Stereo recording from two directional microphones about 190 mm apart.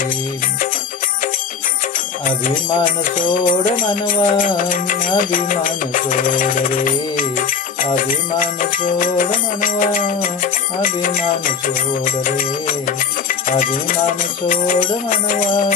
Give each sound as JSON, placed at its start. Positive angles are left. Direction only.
{"t": 2.2, "sound": "music", "side_deg": 45}